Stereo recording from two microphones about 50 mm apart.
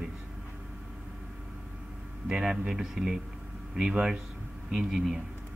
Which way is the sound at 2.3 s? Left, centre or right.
Centre.